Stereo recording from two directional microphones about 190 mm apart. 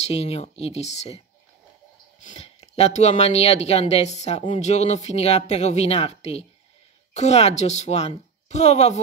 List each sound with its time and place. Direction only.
0.0 s speech: 35° left (ahead or behind)